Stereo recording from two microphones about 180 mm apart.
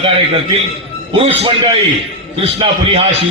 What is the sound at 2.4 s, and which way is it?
Speech, 35° right (ahead or behind).